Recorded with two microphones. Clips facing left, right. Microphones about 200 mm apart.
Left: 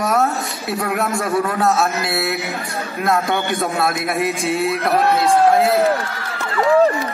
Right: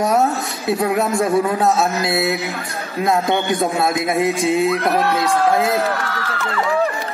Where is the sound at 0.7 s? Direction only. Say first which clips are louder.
Right 3 dB; 20° right (ahead or behind).